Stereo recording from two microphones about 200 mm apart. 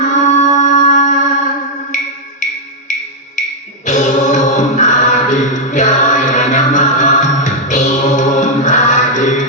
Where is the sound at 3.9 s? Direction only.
35° left (ahead or behind).